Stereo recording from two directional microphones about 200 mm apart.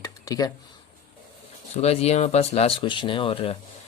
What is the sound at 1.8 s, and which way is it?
Speech, 30° left (ahead or behind).